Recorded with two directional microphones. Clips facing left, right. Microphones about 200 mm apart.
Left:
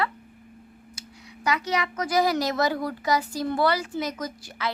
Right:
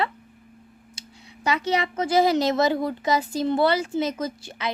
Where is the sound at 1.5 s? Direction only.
30° right (ahead or behind).